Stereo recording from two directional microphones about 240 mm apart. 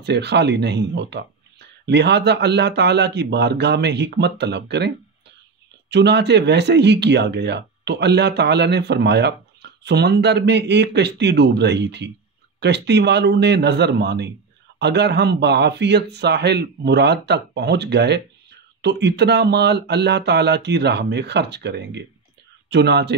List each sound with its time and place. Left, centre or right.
0.0 s speech: right